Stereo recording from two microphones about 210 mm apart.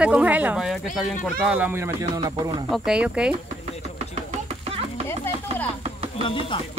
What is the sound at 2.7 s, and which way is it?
Speech, 5° right (ahead or behind).